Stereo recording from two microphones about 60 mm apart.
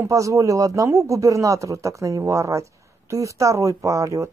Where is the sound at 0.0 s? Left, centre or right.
Right.